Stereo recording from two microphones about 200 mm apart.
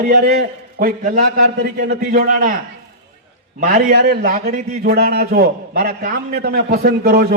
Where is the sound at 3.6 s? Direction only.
50° right (ahead or behind).